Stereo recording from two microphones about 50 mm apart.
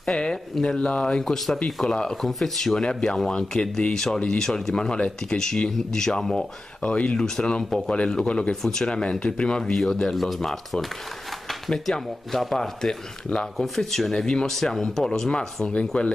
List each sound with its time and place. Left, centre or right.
0.0 s speech: centre
1.2 s speech: centre
6.8 s speech: left; by 10.9 s centre
11.4 s a sound: centre
11.9 s speech: centre; by 15.9 s left